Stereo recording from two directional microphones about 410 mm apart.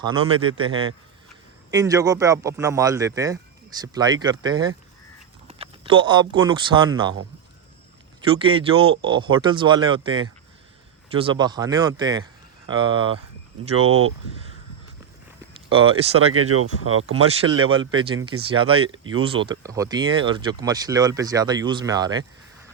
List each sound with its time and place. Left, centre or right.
0.0 s speech: centre
8.4 s speech: centre
13.7 s speech: right
15.7 s speech: centre
16.3 s speech: right
17.2 s speech: centre
18.8 s speech: right
19.1 s speech: centre